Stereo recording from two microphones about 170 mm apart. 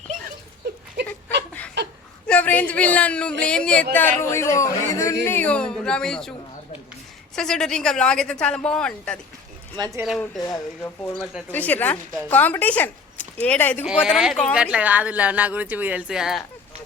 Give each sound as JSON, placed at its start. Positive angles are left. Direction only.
{"t": 1.0, "sound": "a sound", "side_deg": -90}
{"t": 2.2, "sound": "speech", "side_deg": 10}
{"t": 7.3, "sound": "speech", "side_deg": 5}
{"t": 9.7, "sound": "speech", "side_deg": -25}
{"t": 10.0, "sound": "speech", "side_deg": 0}
{"t": 10.4, "sound": "speech", "side_deg": 20}
{"t": 11.0, "sound": "speech", "side_deg": 0}
{"t": 13.8, "sound": "speech", "side_deg": -5}